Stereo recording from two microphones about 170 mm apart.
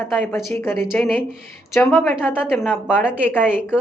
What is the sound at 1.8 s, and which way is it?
A woman's voice, 5° left (ahead or behind).